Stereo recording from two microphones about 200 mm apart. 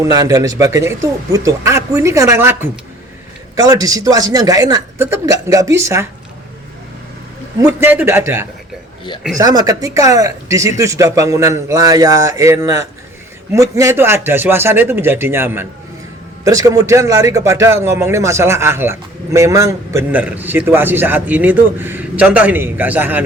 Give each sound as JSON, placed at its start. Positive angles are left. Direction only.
{"t": 0.0, "sound": "a man's voice", "side_deg": -20}
{"t": 7.6, "sound": "a man's voice", "side_deg": -10}